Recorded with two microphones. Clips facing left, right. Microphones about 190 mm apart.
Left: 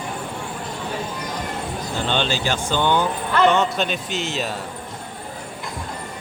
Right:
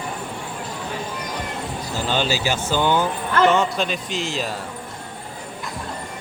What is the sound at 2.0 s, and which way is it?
A man's voice, 5° right (ahead or behind).